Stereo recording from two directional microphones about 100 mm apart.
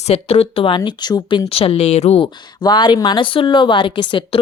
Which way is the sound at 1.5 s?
75° left (ahead or behind).